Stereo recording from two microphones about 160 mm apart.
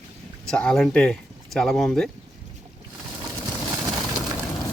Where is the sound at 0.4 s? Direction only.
5° left (ahead or behind).